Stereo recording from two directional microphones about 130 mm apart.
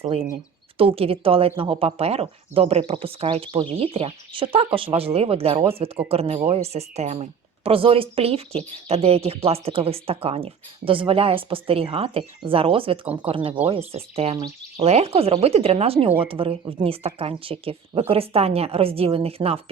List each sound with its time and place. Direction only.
0.8 s a woman's voice: 45° right (ahead or behind)